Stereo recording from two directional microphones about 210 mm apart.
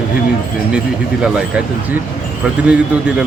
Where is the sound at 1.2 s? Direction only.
5° right (ahead or behind).